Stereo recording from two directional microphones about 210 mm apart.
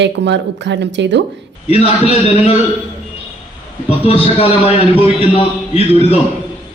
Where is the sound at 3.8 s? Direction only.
25° left (ahead or behind).